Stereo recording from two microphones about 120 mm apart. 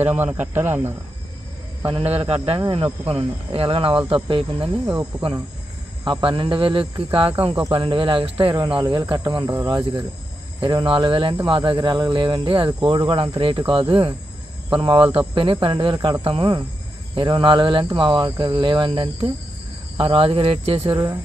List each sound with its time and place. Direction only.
0.0 s speech: 15° right (ahead or behind)
2.0 s a man's voice: 60° right (ahead or behind)
6.0 s speech: 40° right (ahead or behind)
20.9 s speech: 30° right (ahead or behind)